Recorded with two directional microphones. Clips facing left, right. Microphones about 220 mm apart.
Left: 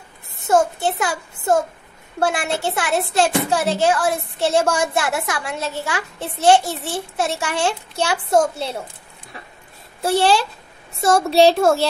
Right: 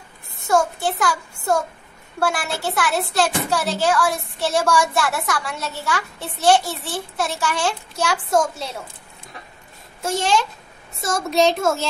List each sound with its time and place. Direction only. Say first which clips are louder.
0.5 s a child's voice: left 2 dB; 25° left (ahead or behind)
10.0 s a child's voice: left 4 dB; 35° left (ahead or behind)